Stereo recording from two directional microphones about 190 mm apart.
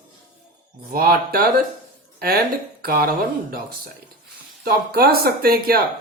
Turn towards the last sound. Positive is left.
turn(degrees=-50)  # may be behind; listen again after turning